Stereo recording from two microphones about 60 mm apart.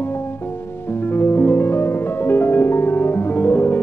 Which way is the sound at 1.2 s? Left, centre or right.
Left.